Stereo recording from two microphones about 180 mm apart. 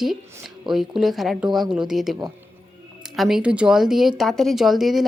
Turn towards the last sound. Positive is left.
turn(degrees=0)  # may be behind; listen again after turning